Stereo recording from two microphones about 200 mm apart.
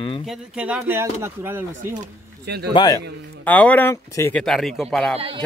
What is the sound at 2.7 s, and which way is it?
Speech, 20° left (ahead or behind).